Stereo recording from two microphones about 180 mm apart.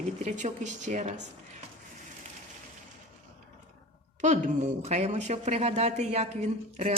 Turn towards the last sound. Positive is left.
turn(degrees=-40)  # may be behind; listen again after turning